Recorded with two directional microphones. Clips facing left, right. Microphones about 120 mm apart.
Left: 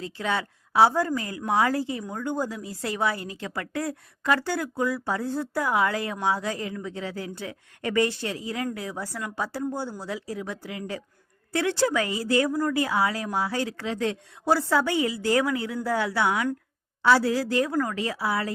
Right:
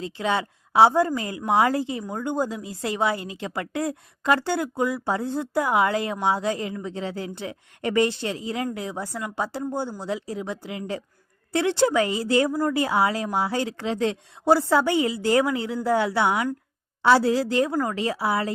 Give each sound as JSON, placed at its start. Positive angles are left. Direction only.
{"t": 0.0, "sound": "speech", "side_deg": -25}